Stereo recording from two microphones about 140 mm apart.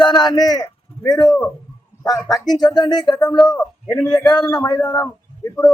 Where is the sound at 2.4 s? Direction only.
30° left (ahead or behind).